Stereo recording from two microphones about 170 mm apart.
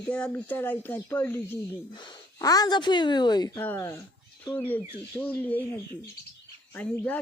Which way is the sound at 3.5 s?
15° left (ahead or behind).